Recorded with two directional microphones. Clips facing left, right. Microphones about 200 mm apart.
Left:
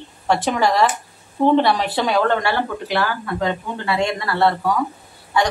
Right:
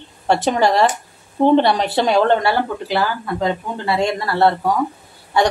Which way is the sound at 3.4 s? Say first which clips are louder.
Right 2 dB; 25° right (ahead or behind).